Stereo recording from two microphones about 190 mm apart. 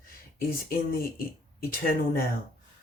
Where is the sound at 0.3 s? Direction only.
50° left (ahead or behind).